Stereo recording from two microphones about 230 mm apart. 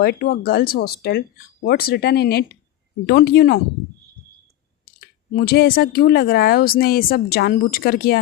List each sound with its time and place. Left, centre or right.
0.0 s speech: left
4.9 s speech: left